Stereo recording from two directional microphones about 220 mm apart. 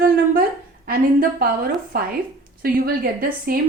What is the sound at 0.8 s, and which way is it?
A woman's voice, 40° right (ahead or behind).